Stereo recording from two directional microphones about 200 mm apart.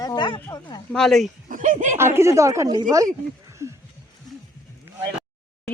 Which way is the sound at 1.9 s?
10° right (ahead or behind).